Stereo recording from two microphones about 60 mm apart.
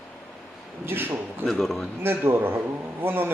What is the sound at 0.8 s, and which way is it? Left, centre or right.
Speech, right.